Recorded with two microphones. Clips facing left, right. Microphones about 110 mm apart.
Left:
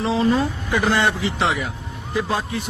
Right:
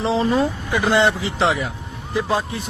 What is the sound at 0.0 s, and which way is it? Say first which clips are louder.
Speech: even; 30° right (ahead or behind).